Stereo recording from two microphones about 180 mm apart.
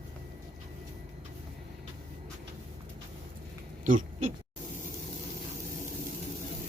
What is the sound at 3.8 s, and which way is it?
Oink, 45° right (ahead or behind).